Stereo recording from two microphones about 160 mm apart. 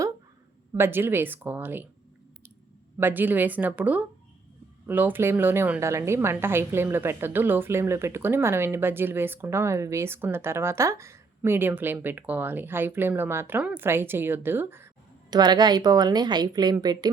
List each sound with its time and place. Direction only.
0.7 s a woman's voice: 15° right (ahead or behind)
3.0 s a woman's voice: 10° right (ahead or behind)
15.3 s a woman's voice: 25° right (ahead or behind)